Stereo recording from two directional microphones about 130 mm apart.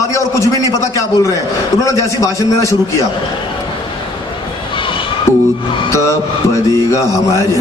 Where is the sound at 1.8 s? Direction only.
25° left (ahead or behind).